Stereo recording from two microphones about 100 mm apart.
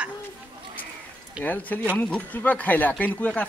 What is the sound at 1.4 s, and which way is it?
Speech, 15° left (ahead or behind).